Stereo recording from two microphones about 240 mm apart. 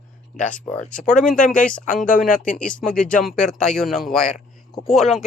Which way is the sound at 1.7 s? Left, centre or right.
Centre.